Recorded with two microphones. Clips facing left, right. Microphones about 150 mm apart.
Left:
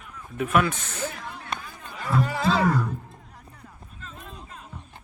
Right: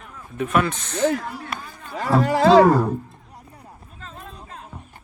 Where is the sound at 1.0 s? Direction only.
70° right (ahead or behind).